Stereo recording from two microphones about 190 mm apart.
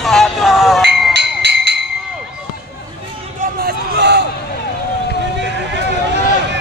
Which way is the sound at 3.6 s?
60° right (ahead or behind).